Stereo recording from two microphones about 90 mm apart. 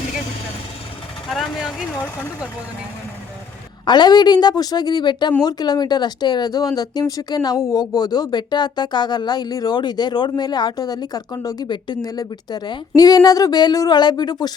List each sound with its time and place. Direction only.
1.3 s speech: centre (ahead or behind)
2.0 s speech: 30° left (ahead or behind)
3.8 s speech: 55° left (ahead or behind)